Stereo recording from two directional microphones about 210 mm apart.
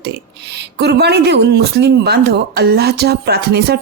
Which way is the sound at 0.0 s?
55° right (ahead or behind).